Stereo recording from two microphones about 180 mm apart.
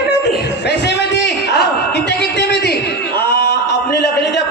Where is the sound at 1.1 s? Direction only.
70° left (ahead or behind).